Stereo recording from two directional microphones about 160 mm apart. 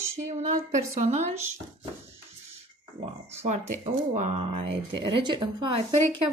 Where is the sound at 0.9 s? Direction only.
45° right (ahead or behind).